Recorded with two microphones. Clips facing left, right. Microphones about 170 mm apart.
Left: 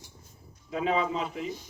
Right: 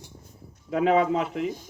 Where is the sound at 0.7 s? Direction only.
60° right (ahead or behind).